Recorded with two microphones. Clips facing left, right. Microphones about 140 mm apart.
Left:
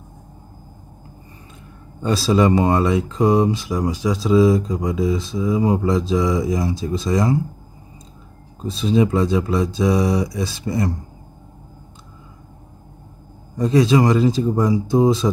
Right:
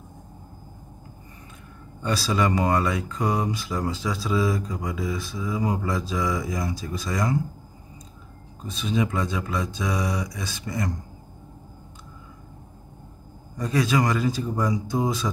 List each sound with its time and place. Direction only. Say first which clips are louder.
2.0 s speech: left 7 dB; 25° left (ahead or behind)
8.5 s speech: left 8 dB; 30° left (ahead or behind)
13.6 s speech: left 8 dB; 25° left (ahead or behind)